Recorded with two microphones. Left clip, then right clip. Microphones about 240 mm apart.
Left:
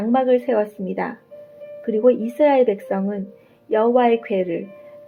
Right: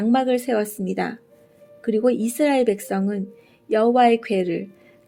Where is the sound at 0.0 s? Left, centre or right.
Right.